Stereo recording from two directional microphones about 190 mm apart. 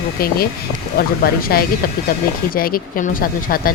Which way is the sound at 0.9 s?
50° left (ahead or behind).